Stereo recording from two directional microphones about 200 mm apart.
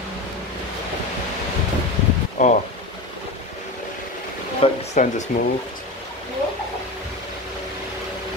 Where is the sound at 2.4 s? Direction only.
40° left (ahead or behind).